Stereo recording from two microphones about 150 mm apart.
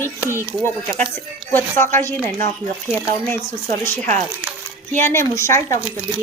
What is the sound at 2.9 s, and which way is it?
Speech, 10° left (ahead or behind).